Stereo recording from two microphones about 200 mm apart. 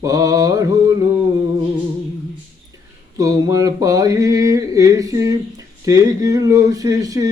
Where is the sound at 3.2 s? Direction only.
15° right (ahead or behind).